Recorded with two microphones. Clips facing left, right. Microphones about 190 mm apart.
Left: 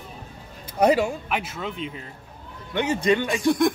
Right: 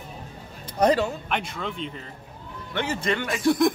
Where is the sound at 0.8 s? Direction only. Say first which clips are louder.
Left 2 dB; 10° left (ahead or behind).